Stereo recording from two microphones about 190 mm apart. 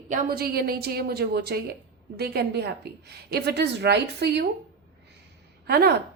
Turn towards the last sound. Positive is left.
turn(degrees=-60)  # may be behind; listen again after turning